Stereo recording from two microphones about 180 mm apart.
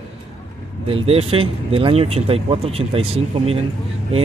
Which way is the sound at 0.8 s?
30° right (ahead or behind).